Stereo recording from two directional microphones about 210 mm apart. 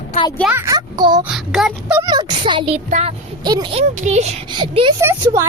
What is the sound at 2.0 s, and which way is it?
A child's voice, 20° right (ahead or behind).